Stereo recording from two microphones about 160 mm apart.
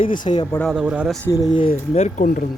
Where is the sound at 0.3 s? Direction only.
40° left (ahead or behind).